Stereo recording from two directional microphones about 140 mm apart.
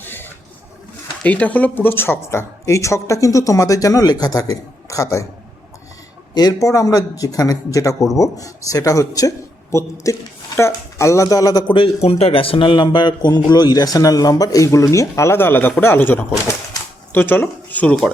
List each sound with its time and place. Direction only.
0.0 s printer: 15° left (ahead or behind)
1.2 s speech: 10° left (ahead or behind)
6.3 s speech: 25° left (ahead or behind)
12.0 s speech: 45° left (ahead or behind); by 18.1 s 5° left (ahead or behind)